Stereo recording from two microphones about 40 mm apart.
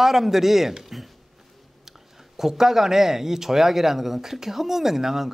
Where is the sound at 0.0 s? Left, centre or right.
Centre.